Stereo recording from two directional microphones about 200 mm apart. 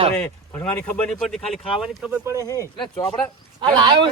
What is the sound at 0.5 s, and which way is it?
Speech, 5° left (ahead or behind).